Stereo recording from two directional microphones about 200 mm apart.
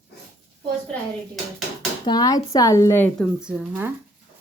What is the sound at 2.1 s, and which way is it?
Speech, 20° left (ahead or behind).